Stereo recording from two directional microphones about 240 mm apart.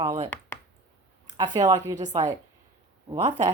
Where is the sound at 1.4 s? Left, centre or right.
Centre.